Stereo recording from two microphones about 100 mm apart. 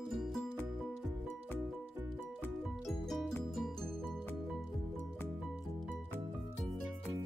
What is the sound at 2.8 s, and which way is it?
Music, centre (ahead or behind).